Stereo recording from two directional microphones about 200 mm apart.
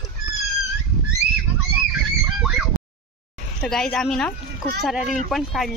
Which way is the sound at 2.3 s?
5° right (ahead or behind).